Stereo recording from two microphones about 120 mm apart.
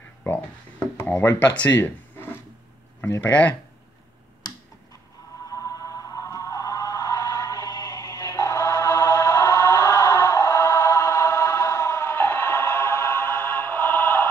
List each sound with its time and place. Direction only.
1.0 s speech: 15° left (ahead or behind)
5.5 s music: 25° left (ahead or behind)